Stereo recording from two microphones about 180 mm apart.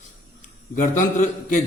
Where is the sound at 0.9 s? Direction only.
45° left (ahead or behind).